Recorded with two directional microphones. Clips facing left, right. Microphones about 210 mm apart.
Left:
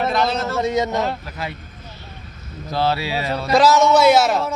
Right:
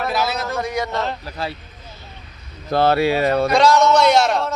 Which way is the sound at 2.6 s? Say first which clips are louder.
Right 5 dB; 55° right (ahead or behind).